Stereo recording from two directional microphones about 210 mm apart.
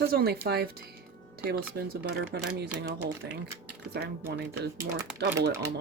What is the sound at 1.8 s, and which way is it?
Speech, 50° right (ahead or behind).